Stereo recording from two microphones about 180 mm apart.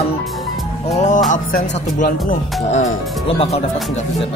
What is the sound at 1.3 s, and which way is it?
Speech, 45° left (ahead or behind).